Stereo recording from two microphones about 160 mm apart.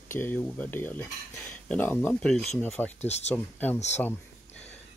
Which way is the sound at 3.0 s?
45° left (ahead or behind).